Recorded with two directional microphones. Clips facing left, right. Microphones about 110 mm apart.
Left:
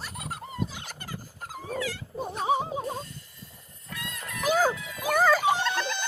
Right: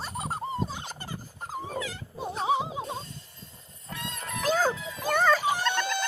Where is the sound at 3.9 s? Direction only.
25° right (ahead or behind).